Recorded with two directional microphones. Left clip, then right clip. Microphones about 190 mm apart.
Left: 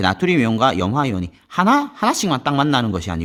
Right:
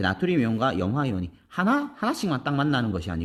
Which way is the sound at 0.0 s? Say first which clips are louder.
Left 7 dB; 35° left (ahead or behind).